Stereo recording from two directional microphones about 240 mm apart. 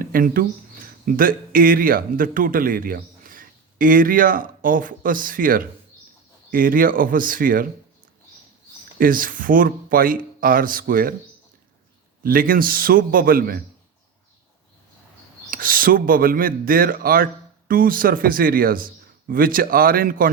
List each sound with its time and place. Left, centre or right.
0.0 s speech: right
9.0 s speech: right
12.2 s speech: right
15.4 s speech: right